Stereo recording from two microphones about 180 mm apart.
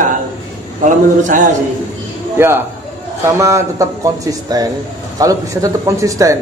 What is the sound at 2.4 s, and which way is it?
A man's voice, 15° right (ahead or behind).